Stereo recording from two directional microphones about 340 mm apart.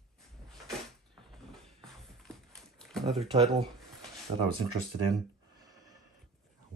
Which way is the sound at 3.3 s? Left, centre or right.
Centre.